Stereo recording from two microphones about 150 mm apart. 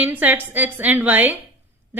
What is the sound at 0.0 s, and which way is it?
A woman's voice, 10° right (ahead or behind).